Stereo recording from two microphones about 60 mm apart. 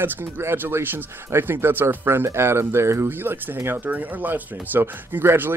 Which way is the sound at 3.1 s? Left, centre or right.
Right.